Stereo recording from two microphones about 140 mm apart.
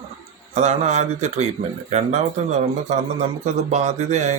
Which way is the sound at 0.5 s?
55° right (ahead or behind).